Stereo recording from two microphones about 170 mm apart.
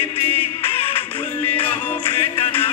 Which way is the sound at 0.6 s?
35° left (ahead or behind).